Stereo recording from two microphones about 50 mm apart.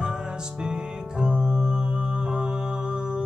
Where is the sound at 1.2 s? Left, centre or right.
Centre.